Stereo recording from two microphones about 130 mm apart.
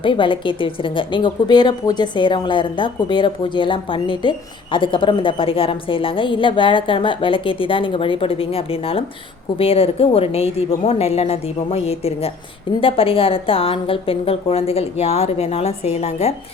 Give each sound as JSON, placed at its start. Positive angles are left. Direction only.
{"t": 0.0, "sound": "a woman's voice", "side_deg": 40}